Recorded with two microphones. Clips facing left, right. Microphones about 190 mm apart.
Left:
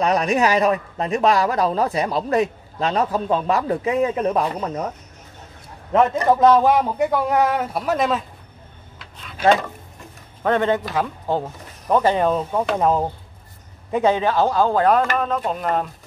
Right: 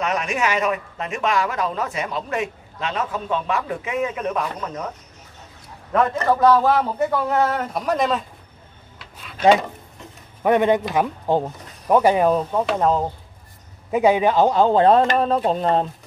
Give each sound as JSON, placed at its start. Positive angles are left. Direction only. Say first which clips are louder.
{"t": 0.0, "sound": "speech", "louder": "left 5 dB", "side_deg": 35}
{"t": 5.9, "sound": "speech", "louder": "left 2 dB", "side_deg": 20}
{"t": 9.4, "sound": "speech", "louder": "right 1 dB", "side_deg": -15}
{"t": 13.8, "sound": "speech", "louder": "right 2 dB", "side_deg": -10}